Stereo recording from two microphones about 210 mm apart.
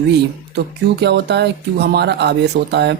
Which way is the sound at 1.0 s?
55° right (ahead or behind).